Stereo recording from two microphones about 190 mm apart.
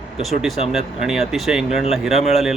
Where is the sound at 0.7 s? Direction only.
Centre (ahead or behind).